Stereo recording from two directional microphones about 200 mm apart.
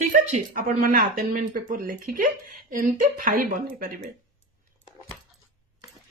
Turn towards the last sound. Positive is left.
turn(degrees=20)  # may be behind; listen again after turning